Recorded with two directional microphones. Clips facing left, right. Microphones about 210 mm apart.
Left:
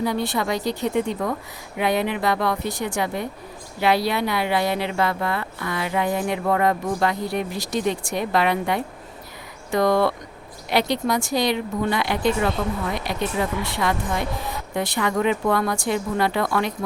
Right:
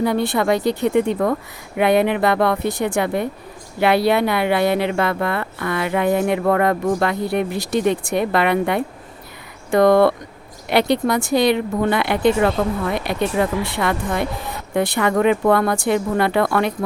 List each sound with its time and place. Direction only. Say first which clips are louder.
0.0 s speech: right 5 dB; 60° right (ahead or behind)